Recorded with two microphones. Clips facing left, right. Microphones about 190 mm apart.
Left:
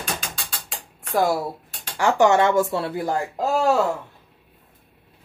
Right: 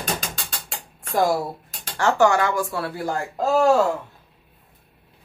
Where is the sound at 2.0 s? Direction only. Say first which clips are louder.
Left 1 dB; 20° left (ahead or behind).